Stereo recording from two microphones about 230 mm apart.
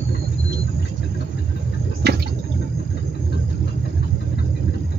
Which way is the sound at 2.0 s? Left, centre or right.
Right.